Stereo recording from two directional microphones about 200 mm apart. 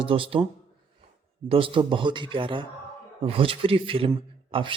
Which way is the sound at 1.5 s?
25° right (ahead or behind).